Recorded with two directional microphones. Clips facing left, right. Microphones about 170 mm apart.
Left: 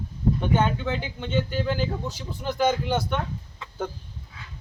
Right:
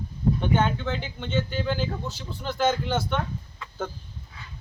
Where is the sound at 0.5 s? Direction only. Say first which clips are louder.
Left 1 dB; 10° left (ahead or behind).